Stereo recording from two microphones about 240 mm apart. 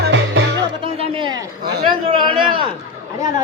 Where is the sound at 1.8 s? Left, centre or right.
Right.